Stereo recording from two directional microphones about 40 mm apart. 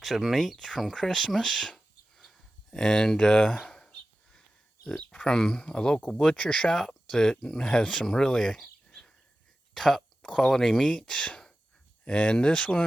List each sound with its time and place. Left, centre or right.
0.0 s speech: centre
3.7 s a sound: centre
5.1 s speech: centre
6.7 s speech: centre
8.9 s bird: centre
9.7 s speech: centre
10.9 s speech: left